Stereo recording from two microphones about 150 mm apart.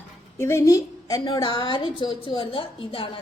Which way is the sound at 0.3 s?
15° left (ahead or behind).